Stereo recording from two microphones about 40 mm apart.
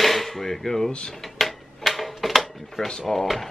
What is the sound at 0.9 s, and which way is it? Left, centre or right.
Speech, left.